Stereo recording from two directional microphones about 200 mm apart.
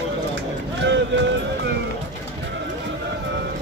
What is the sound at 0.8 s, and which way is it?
Speech, 65° right (ahead or behind).